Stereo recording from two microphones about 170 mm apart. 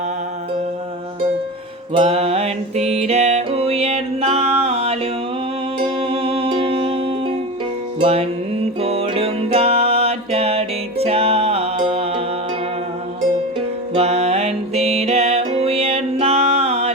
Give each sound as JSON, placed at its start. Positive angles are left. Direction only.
{"t": 1.9, "sound": "music", "side_deg": -35}
{"t": 13.9, "sound": "music", "side_deg": -40}